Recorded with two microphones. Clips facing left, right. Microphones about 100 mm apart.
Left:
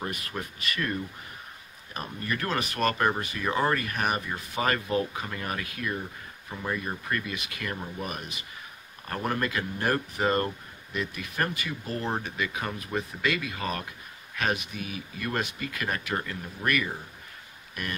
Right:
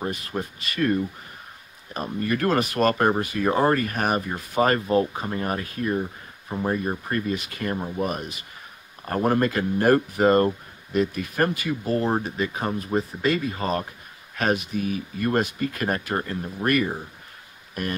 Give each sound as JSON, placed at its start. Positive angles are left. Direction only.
{"t": 0.0, "sound": "speech", "side_deg": -30}
{"t": 2.1, "sound": "speech", "side_deg": -45}
{"t": 14.3, "sound": "a sound", "side_deg": -40}
{"t": 14.7, "sound": "speech", "side_deg": -40}